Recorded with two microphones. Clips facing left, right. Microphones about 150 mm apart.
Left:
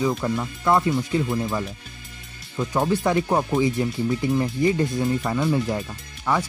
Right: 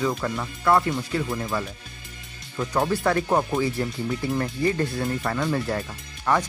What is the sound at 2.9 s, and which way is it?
Speech, 15° left (ahead or behind).